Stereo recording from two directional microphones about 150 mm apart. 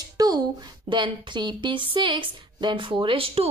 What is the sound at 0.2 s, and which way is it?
A woman's voice, 25° right (ahead or behind).